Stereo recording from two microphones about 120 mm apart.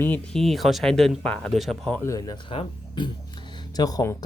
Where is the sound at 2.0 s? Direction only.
30° left (ahead or behind).